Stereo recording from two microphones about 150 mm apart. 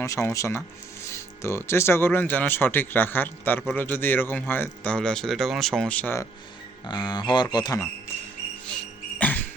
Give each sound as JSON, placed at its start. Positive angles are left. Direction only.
{"t": 0.3, "sound": "speech", "side_deg": 20}
{"t": 6.8, "sound": "speech", "side_deg": 30}
{"t": 9.1, "sound": "music", "side_deg": 10}